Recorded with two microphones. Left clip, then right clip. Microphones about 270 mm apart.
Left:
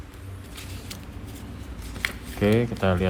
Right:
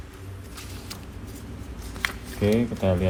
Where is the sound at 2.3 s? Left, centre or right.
Left.